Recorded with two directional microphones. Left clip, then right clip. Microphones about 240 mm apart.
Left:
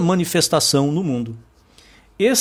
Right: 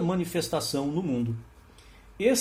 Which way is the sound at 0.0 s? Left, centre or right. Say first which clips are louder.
Left 10 dB; left.